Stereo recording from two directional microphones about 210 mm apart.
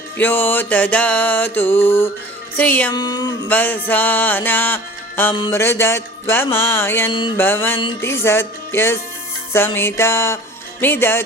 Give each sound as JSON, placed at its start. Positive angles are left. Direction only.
{"t": 0.2, "sound": "mantra", "side_deg": 10}
{"t": 2.9, "sound": "a sound", "side_deg": 20}
{"t": 3.5, "sound": "mantra", "side_deg": 10}
{"t": 7.1, "sound": "a sound", "side_deg": 20}
{"t": 7.3, "sound": "mantra", "side_deg": 10}
{"t": 9.5, "sound": "music", "side_deg": 10}